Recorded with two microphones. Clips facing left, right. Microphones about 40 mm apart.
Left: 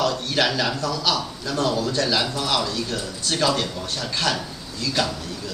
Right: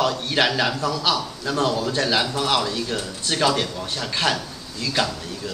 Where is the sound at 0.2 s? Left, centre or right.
Right.